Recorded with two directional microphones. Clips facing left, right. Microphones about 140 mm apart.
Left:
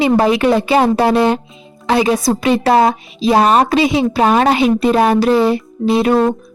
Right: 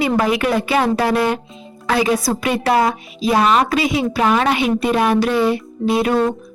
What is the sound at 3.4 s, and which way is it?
Speech, 40° left (ahead or behind).